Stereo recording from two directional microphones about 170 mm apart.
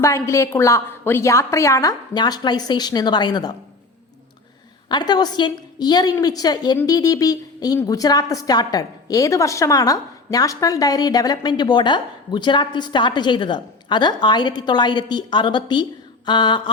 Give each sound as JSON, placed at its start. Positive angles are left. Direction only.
{"t": 0.0, "sound": "a woman's voice", "side_deg": 15}
{"t": 4.9, "sound": "a woman's voice", "side_deg": 25}